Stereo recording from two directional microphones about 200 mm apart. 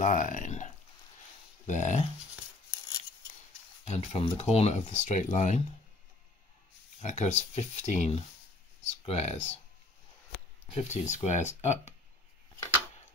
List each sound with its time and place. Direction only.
0.0 s a sound: 40° left (ahead or behind)
1.7 s speech: 35° left (ahead or behind)
3.8 s speech: 30° left (ahead or behind)
7.0 s speech: 35° left (ahead or behind)
10.7 s speech: 35° left (ahead or behind)